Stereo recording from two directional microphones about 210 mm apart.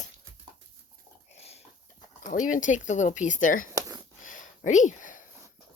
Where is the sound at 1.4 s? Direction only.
30° left (ahead or behind).